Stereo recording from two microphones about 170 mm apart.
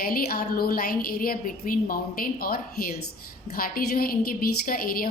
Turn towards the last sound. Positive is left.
turn(degrees=60)  # may be behind; listen again after turning